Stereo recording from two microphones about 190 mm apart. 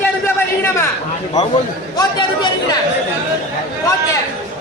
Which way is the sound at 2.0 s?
25° left (ahead or behind).